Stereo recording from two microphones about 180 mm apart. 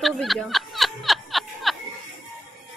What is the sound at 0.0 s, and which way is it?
Snicker, centre (ahead or behind).